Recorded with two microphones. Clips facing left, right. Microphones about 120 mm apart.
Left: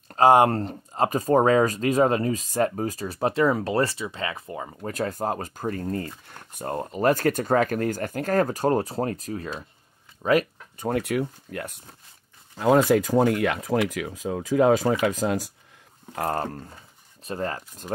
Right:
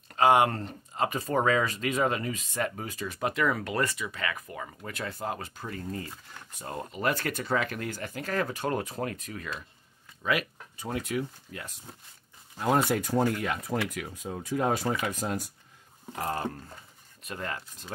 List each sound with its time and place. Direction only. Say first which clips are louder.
0.1 s speech: left 5 dB; 35° left (ahead or behind)
10.2 s a sound: left 8 dB; 40° left (ahead or behind)
10.9 s speech: left 7 dB; 65° left (ahead or behind)
12.5 s speech: left 7 dB; 90° left
16.2 s speech: left 6 dB; 55° left (ahead or behind)
17.2 s speech: left 7 dB; 35° left (ahead or behind)